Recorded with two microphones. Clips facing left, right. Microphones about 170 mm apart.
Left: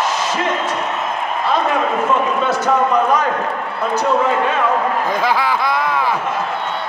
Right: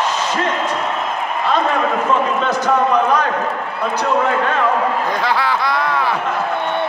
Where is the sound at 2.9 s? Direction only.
10° left (ahead or behind).